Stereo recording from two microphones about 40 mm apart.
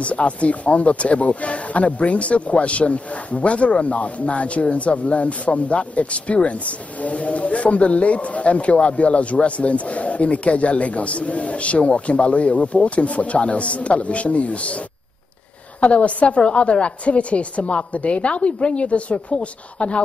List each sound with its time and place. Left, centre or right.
0.0 s speech: left
15.8 s speech: left